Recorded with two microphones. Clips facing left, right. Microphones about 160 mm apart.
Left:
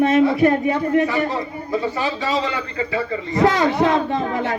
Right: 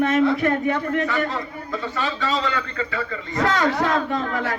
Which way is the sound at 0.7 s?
30° left (ahead or behind).